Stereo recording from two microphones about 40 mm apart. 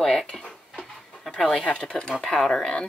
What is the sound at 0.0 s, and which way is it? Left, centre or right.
Dishes, centre.